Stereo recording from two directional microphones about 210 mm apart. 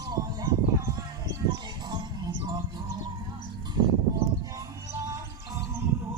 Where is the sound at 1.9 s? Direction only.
20° right (ahead or behind).